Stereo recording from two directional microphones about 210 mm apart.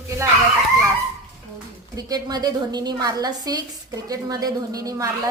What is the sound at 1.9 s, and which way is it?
A woman's voice, 20° right (ahead or behind).